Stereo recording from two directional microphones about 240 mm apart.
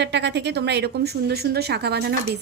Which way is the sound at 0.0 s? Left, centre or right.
Right.